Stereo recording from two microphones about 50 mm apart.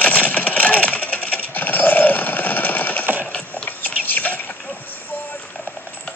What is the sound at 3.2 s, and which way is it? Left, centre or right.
Horse, left.